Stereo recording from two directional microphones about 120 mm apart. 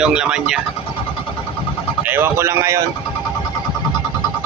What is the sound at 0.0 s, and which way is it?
Speech, 5° right (ahead or behind).